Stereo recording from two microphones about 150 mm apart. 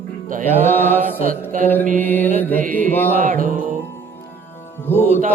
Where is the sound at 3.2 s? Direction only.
65° right (ahead or behind).